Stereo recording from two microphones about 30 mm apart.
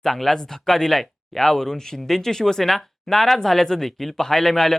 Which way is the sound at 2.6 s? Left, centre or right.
Centre.